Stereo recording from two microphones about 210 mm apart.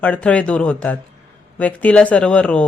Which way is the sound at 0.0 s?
5° left (ahead or behind).